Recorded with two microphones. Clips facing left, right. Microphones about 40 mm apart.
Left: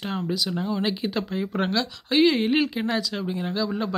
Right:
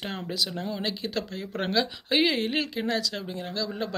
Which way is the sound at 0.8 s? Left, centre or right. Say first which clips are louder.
Left 4 dB; centre.